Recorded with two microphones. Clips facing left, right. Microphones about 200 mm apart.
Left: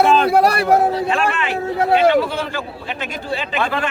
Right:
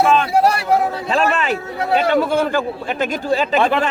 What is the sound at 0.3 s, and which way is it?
Speech, 60° left (ahead or behind).